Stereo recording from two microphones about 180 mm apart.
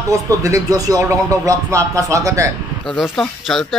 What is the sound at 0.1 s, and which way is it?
Speech, 20° right (ahead or behind).